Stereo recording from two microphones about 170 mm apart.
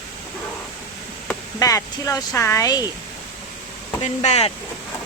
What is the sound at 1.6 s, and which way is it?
Speech, 20° left (ahead or behind).